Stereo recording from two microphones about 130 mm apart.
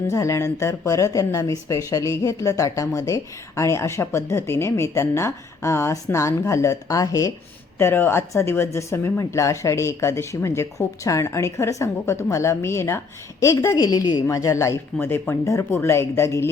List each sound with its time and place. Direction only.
0.1 s speech: 25° left (ahead or behind)